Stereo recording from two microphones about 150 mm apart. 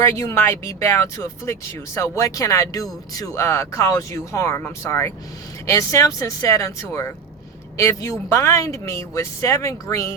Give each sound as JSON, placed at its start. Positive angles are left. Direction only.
{"t": 0.0, "sound": "speech", "side_deg": 20}